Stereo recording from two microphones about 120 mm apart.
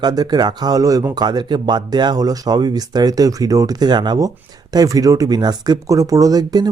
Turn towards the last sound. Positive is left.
turn(degrees=-35)  # may be behind; listen again after turning